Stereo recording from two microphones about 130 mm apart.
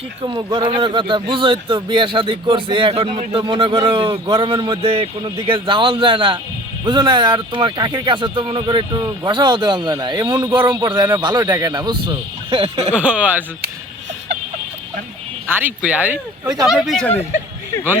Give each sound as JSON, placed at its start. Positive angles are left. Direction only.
{"t": 0.5, "sound": "speech", "side_deg": -40}
{"t": 12.9, "sound": "speech", "side_deg": -10}
{"t": 15.4, "sound": "speech", "side_deg": -15}